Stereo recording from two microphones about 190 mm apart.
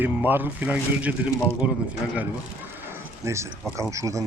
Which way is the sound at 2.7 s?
15° right (ahead or behind).